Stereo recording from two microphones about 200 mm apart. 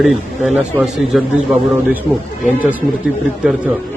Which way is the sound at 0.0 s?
Centre (ahead or behind).